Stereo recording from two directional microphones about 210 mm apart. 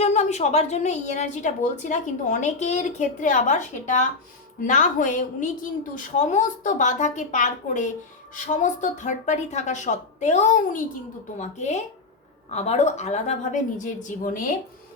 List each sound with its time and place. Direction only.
0.0 s a woman's voice: 30° left (ahead or behind)